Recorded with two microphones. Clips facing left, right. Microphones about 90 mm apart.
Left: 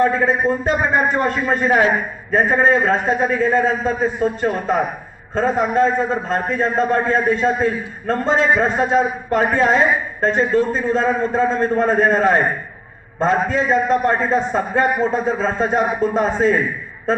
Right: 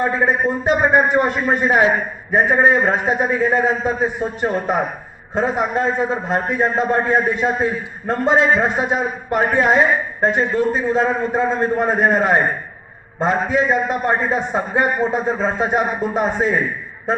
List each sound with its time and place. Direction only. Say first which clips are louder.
0.0 s a man's voice: left 1 dB; 15° right (ahead or behind)
13.5 s a man's voice: left 1 dB; 10° right (ahead or behind)